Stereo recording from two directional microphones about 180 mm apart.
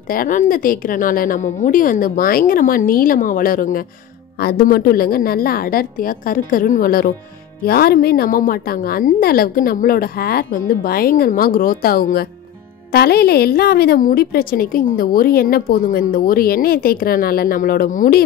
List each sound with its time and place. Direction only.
0.1 s a woman's voice: 50° left (ahead or behind)